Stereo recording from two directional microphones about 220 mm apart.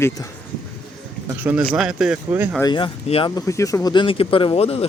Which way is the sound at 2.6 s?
20° left (ahead or behind).